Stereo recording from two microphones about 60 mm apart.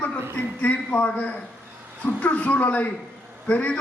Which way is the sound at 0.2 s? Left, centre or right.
Right.